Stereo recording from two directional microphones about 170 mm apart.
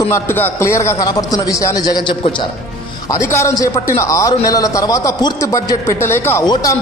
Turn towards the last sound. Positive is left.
turn(degrees=20)  # may be behind; listen again after turning